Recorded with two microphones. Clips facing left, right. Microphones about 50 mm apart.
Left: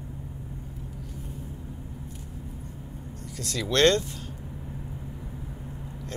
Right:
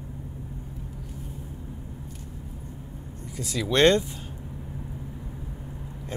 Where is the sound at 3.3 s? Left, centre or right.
Centre.